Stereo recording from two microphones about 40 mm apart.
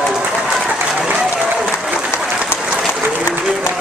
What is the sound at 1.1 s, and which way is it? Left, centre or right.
Applause, centre.